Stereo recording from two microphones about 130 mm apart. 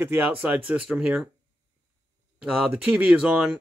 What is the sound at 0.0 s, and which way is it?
Speech, 15° right (ahead or behind).